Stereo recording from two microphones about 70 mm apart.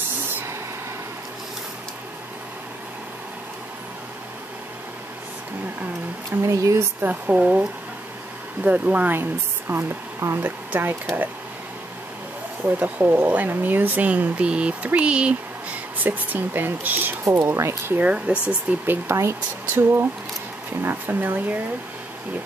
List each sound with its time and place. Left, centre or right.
6.4 s speech: right
7.0 s speech: right
8.6 s speech: right
12.6 s speech: right
16.0 s speech: right
17.2 s speech: right
17.9 s speech: centre
19.0 s speech: right